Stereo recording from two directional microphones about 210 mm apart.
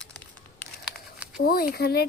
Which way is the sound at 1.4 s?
45° left (ahead or behind).